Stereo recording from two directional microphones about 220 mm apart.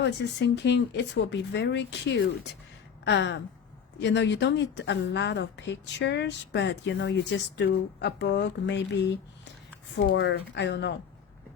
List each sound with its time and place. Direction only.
0.0 s a woman's voice: 50° left (ahead or behind)
3.0 s a sound: 55° left (ahead or behind)
4.0 s a woman's voice: 55° left (ahead or behind)